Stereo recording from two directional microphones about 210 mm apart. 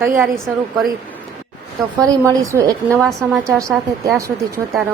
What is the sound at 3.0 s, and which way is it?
Speech, centre (ahead or behind).